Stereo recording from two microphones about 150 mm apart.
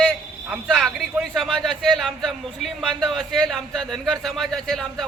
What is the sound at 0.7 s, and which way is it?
A man's voice, centre (ahead or behind).